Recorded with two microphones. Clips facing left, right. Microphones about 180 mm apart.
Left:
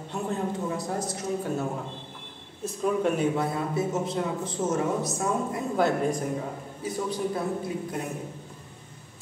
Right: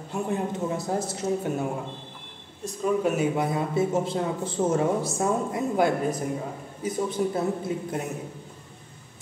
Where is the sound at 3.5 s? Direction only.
25° right (ahead or behind).